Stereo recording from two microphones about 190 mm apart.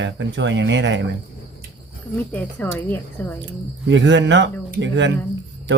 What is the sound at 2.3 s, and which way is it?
Speech, 10° left (ahead or behind).